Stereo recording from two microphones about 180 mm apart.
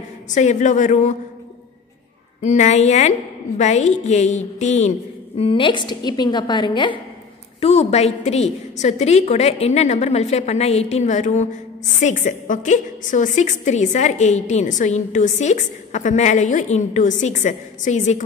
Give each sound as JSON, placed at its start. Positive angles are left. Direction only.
{"t": 0.3, "sound": "a woman's voice", "side_deg": 40}
{"t": 2.4, "sound": "a woman's voice", "side_deg": 40}
{"t": 5.4, "sound": "a woman's voice", "side_deg": 30}
{"t": 7.6, "sound": "a woman's voice", "side_deg": 35}